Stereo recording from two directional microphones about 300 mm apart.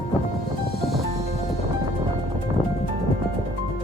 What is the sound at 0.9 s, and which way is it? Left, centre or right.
Music, centre.